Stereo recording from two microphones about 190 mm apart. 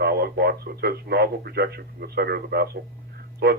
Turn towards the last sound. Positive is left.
turn(degrees=-55)  # may be behind; listen again after turning